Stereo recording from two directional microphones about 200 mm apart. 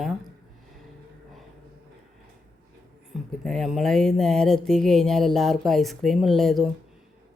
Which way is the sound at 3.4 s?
Centre (ahead or behind).